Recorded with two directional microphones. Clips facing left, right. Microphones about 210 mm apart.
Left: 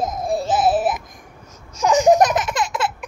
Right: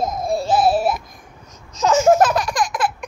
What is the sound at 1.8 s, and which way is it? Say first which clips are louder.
Laughter: even; 15° left (ahead or behind).